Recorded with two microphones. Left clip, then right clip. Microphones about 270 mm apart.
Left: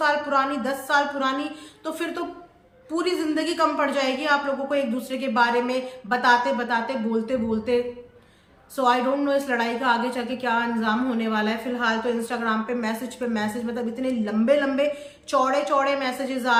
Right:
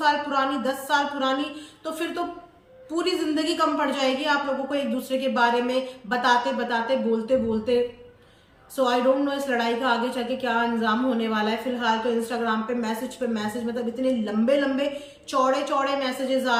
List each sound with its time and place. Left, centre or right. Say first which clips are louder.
0.0 s a woman's voice: left 1 dB; centre